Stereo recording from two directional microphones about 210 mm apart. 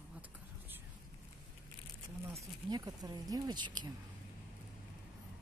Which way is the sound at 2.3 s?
20° right (ahead or behind).